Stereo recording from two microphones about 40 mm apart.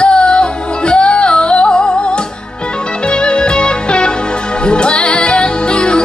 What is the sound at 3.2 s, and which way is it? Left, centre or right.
Music, left.